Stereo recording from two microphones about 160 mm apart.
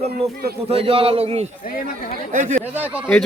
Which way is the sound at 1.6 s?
65° left (ahead or behind).